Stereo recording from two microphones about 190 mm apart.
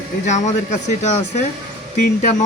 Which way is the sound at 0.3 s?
40° left (ahead or behind).